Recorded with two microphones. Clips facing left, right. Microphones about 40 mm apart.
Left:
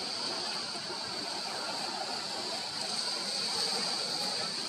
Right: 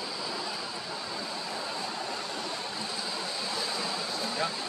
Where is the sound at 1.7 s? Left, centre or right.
Right.